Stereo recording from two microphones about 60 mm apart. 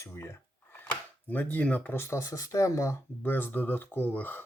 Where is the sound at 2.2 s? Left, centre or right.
Left.